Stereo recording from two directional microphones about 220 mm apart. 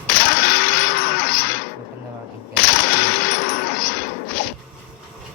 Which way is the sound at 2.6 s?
45° left (ahead or behind).